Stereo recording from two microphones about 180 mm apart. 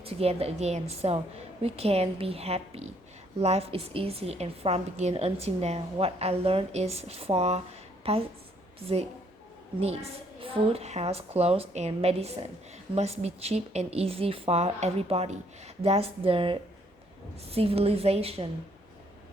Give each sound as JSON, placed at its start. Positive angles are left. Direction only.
{"t": 0.0, "sound": "a woman's voice", "side_deg": -35}
{"t": 9.8, "sound": "a woman's voice", "side_deg": -35}